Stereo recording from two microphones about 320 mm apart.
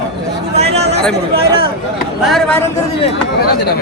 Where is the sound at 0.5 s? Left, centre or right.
Centre.